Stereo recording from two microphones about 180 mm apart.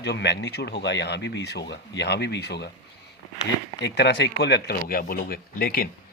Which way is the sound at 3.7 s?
75° left (ahead or behind).